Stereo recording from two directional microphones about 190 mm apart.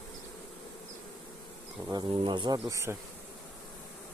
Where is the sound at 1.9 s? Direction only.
20° right (ahead or behind).